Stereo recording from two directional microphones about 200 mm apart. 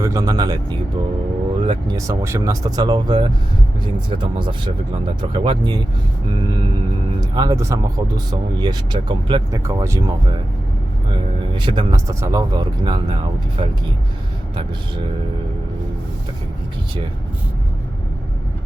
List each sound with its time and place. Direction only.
0.0 s speech: 15° right (ahead or behind)
7.1 s speech: 20° right (ahead or behind)
11.1 s speech: 25° right (ahead or behind)